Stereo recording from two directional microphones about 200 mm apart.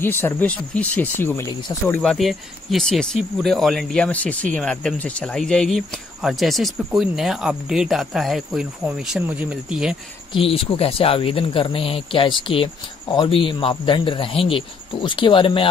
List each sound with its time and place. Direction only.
0.0 s speech: 10° left (ahead or behind); by 9.9 s 5° right (ahead or behind)
10.3 s speech: 30° left (ahead or behind)